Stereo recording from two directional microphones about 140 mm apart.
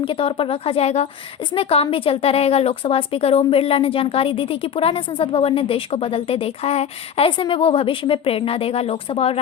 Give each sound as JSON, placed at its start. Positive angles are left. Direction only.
{"t": 0.0, "sound": "a woman's voice", "side_deg": 40}